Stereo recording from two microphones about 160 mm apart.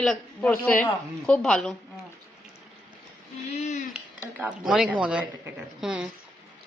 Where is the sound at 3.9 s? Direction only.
5° right (ahead or behind).